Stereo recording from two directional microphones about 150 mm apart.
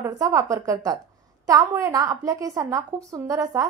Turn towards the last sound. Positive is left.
turn(degrees=-20)  # may be behind; listen again after turning